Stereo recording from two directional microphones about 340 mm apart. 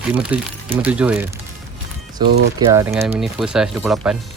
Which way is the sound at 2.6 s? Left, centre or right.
Centre.